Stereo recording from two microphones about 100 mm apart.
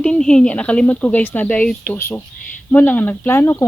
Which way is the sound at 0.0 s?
10° left (ahead or behind).